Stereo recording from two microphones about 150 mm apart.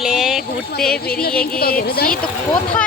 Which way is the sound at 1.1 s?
85° left.